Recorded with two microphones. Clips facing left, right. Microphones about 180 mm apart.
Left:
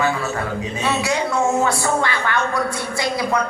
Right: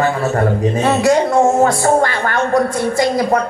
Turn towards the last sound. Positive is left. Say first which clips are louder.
# right 8 dB
turn(degrees=-45)  # may be behind; listen again after turning